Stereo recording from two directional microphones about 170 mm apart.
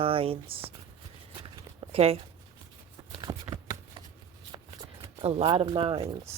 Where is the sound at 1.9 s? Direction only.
35° right (ahead or behind).